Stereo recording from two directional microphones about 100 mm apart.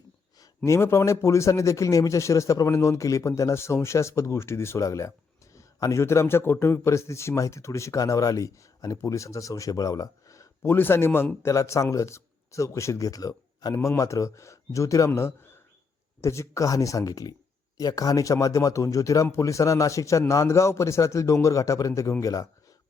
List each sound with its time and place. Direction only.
0.3 s a man's voice: 30° left (ahead or behind)
10.6 s a man's voice: 20° left (ahead or behind)